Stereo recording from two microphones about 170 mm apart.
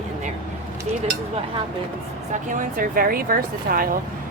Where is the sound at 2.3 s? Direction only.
50° right (ahead or behind).